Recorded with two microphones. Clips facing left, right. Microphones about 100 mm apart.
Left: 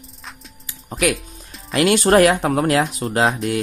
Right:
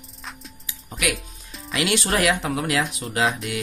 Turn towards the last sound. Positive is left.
turn(degrees=40)  # may be behind; listen again after turning